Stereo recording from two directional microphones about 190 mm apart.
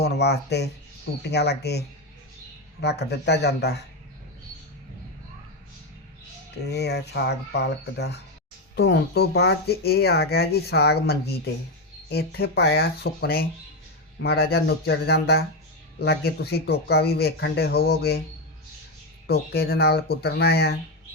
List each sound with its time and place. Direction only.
0.0 s speech: 60° left (ahead or behind)
2.8 s speech: 60° left (ahead or behind)
6.7 s speech: 60° left (ahead or behind)
19.3 s speech: 55° left (ahead or behind)